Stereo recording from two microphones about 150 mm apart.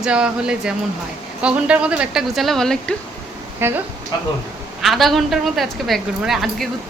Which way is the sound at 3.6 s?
15° right (ahead or behind).